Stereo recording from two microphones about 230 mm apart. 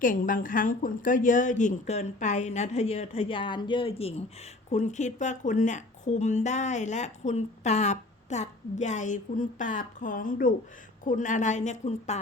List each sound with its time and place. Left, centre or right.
0.0 s a woman's voice: left